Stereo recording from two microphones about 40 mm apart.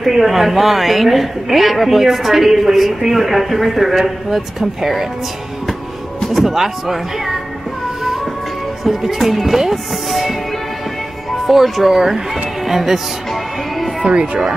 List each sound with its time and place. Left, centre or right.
0.0 s speech: centre
6.2 s speech: centre
8.8 s speech: centre
11.4 s speech: centre
14.0 s speech: right